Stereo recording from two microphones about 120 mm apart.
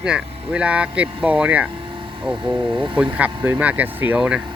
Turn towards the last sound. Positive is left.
turn(degrees=-10)  # may be behind; listen again after turning